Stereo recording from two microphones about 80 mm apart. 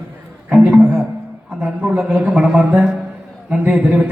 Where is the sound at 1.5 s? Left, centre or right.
Centre.